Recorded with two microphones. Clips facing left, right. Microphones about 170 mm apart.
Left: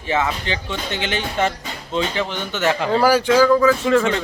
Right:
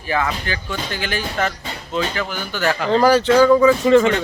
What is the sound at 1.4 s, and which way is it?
Music, 25° left (ahead or behind).